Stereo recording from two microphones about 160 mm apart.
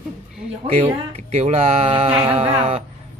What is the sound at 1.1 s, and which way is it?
Music, 40° right (ahead or behind).